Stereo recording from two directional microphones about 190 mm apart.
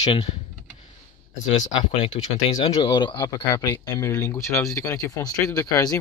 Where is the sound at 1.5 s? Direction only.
35° left (ahead or behind).